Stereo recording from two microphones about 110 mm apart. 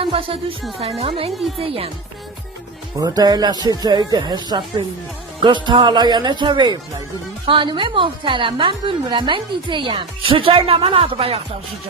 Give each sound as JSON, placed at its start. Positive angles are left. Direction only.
{"t": 0.0, "sound": "music", "side_deg": -55}
{"t": 0.8, "sound": "music", "side_deg": -65}
{"t": 1.3, "sound": "a woman's voice", "side_deg": 0}
{"t": 1.5, "sound": "music", "side_deg": -60}
{"t": 3.0, "sound": "a woman's voice", "side_deg": -35}
{"t": 7.4, "sound": "a woman's voice", "side_deg": -50}